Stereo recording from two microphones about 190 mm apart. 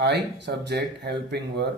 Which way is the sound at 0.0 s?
65° right (ahead or behind).